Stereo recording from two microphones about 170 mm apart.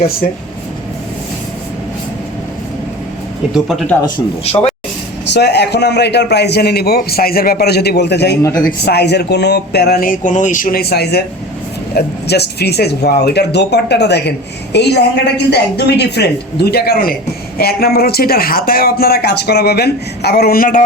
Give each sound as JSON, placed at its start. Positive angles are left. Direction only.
{"t": 3.5, "sound": "speech", "side_deg": 0}
{"t": 4.5, "sound": "speech", "side_deg": 40}
{"t": 5.3, "sound": "speech", "side_deg": 80}
{"t": 8.4, "sound": "speech", "side_deg": 20}
{"t": 8.8, "sound": "speech", "side_deg": 75}